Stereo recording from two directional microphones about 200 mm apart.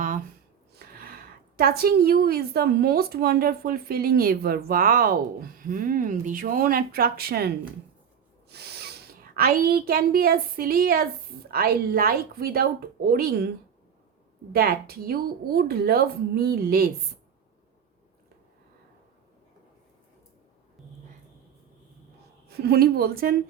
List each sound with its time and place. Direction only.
1.5 s a woman's voice: 50° right (ahead or behind)
14.5 s a woman's voice: 50° right (ahead or behind)
22.4 s a woman's voice: 50° right (ahead or behind)